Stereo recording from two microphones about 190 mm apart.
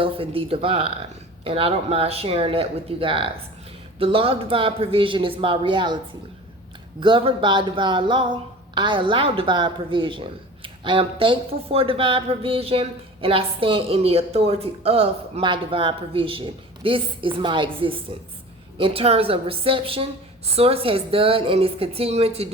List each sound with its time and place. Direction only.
0.0 s a woman's voice: 30° right (ahead or behind)
7.0 s a woman's voice: 25° right (ahead or behind)